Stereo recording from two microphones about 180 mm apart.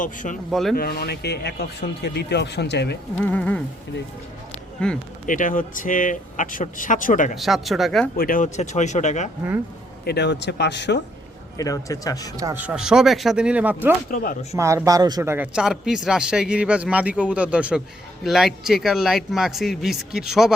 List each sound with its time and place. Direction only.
0.0 s speech: 45° left (ahead or behind)
0.5 s a man's voice: centre (ahead or behind)
0.8 s a man's voice: 60° left (ahead or behind)
3.2 s speech: 10° left (ahead or behind)
4.8 s a man's voice: 5° left (ahead or behind)
5.2 s speech: 45° left (ahead or behind)
7.3 s a man's voice: centre (ahead or behind)
8.1 s speech: 55° left (ahead or behind)
10.0 s speech: 65° left (ahead or behind)
11.5 s speech: 20° left (ahead or behind)
12.5 s a man's voice: 5° right (ahead or behind)
14.1 s speech: 55° left (ahead or behind)
14.5 s a man's voice: 15° right (ahead or behind)